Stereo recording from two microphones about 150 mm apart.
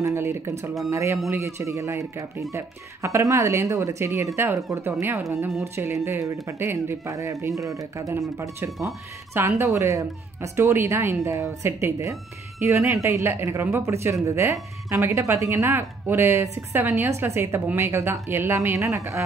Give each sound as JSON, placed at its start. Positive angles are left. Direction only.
{"t": 0.0, "sound": "speech", "side_deg": -20}